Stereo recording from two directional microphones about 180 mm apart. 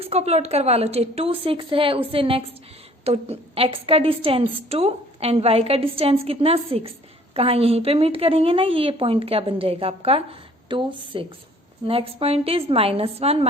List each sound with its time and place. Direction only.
0.0 s a woman's voice: 35° right (ahead or behind)